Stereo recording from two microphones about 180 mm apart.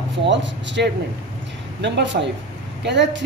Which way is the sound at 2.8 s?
75° right (ahead or behind).